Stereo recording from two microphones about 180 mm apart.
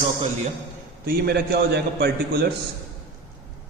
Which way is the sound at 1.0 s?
60° right (ahead or behind).